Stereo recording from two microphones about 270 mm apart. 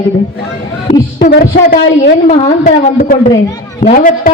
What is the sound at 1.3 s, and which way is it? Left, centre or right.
A man's voice, left.